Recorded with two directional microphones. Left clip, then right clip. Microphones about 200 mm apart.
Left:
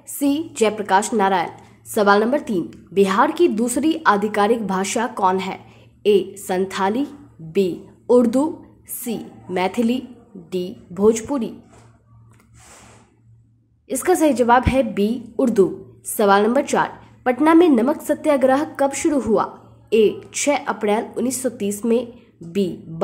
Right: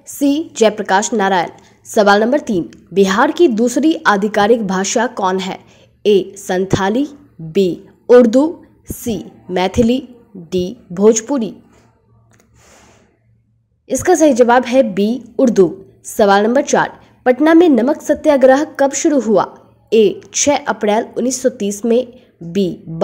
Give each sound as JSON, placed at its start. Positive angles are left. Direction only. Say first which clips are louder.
{"t": 0.0, "sound": "a woman's voice", "louder": "right 5 dB", "side_deg": -25}
{"t": 13.8, "sound": "a woman's voice", "louder": "right 6 dB", "side_deg": -20}